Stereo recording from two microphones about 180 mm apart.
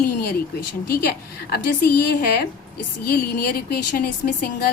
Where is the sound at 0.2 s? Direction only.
60° left (ahead or behind).